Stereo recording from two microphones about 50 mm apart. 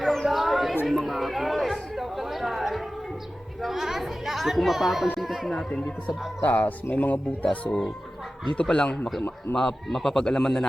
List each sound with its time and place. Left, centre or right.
0.0 s a sound: centre
0.9 s chatter: centre
5.1 s a sound: centre
5.5 s speech: centre
6.1 s speech: left
7.6 s speech: left
8.6 s speech: centre